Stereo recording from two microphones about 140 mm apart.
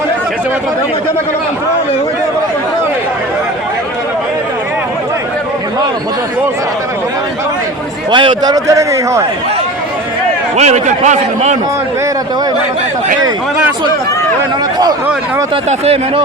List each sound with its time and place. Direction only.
8.1 s a man's voice: 35° right (ahead or behind)
10.6 s a man's voice: 55° right (ahead or behind)
15.8 s speech: 45° right (ahead or behind)